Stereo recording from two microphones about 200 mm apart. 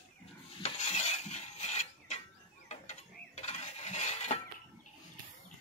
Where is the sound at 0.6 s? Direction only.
35° left (ahead or behind).